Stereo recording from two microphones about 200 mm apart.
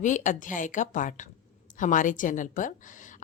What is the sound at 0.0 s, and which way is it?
A woman's voice, 40° left (ahead or behind).